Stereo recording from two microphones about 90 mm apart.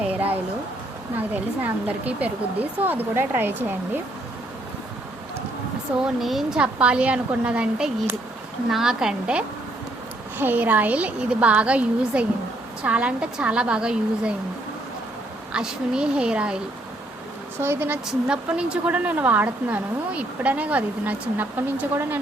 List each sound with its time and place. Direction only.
0.1 s a sound: 20° right (ahead or behind)
1.3 s speech: 20° right (ahead or behind)
6.1 s speech: centre (ahead or behind)
6.6 s a woman's voice: 15° right (ahead or behind)
10.3 s a woman's voice: 20° right (ahead or behind)
15.5 s a woman's voice: 10° right (ahead or behind)
17.6 s speech: 25° right (ahead or behind)
18.1 s a woman's voice: 10° right (ahead or behind)